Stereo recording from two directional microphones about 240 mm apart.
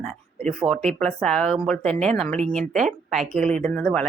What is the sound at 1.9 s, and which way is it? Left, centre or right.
Speech, right.